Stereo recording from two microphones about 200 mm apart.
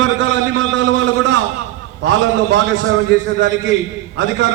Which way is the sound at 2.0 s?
65° right (ahead or behind).